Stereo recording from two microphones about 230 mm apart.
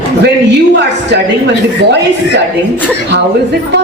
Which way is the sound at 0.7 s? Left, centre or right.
Right.